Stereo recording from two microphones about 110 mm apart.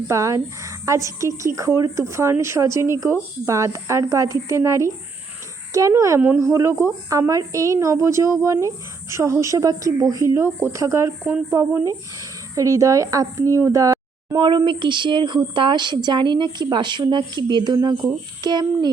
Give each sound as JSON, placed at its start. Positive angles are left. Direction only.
{"t": 0.1, "sound": "a woman's voice", "side_deg": -30}